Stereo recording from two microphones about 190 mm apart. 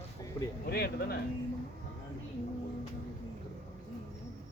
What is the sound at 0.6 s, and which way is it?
Speech, 55° left (ahead or behind).